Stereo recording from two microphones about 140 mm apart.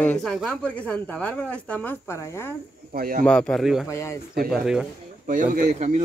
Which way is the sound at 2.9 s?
90° right.